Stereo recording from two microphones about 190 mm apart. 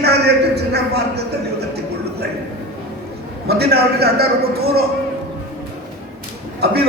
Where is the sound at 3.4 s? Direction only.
55° right (ahead or behind).